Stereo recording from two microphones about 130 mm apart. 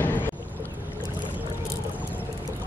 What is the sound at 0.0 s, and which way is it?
Boat, 15° left (ahead or behind).